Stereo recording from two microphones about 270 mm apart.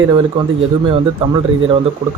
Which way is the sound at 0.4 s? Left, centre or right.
Centre.